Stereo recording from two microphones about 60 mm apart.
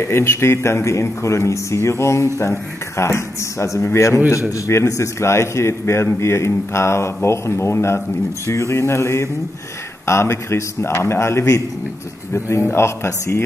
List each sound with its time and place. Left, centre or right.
0.0 s speech: left